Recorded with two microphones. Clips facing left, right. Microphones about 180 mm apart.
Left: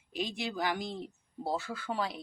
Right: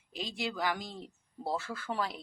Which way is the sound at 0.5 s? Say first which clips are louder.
Left 1 dB; 20° left (ahead or behind).